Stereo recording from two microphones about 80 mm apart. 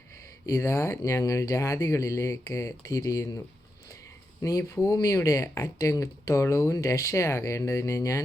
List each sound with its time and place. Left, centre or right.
0.4 s speech: left
4.7 s speech: left